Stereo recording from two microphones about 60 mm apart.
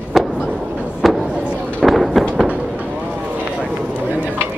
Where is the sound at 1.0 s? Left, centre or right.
Centre.